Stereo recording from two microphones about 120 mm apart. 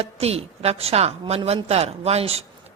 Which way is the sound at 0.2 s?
60° right (ahead or behind).